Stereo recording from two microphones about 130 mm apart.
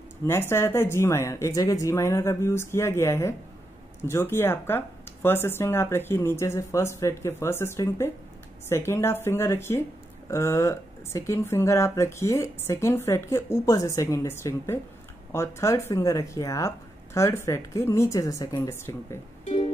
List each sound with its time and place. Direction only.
0.3 s speech: 20° left (ahead or behind)
19.4 s music: 55° left (ahead or behind)